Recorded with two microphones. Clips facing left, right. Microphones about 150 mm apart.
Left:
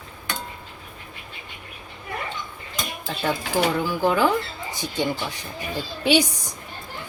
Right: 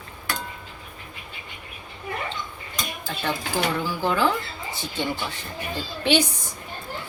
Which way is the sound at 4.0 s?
15° left (ahead or behind).